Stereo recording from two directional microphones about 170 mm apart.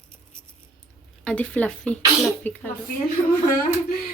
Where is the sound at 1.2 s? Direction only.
10° left (ahead or behind).